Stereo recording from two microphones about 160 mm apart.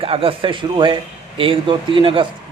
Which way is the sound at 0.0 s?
35° right (ahead or behind).